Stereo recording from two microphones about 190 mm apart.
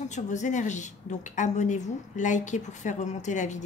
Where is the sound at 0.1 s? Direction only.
40° left (ahead or behind).